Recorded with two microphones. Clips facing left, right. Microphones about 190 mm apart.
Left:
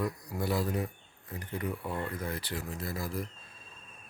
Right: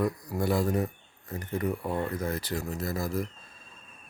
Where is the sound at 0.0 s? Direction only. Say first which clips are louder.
Right 5 dB; 50° right (ahead or behind).